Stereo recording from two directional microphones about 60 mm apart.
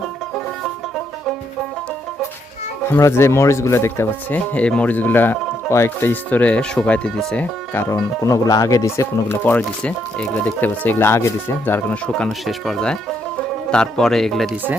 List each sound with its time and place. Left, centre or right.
0.3 s music: centre
3.0 s speech: left
4.3 s speech: left
6.4 s speech: centre
7.7 s speech: left
7.9 s speech: left
9.5 s speech: left
10.9 s speech: left
11.6 s speech: left
13.7 s speech: centre